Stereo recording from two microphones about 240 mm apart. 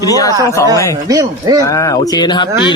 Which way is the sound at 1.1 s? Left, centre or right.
Centre.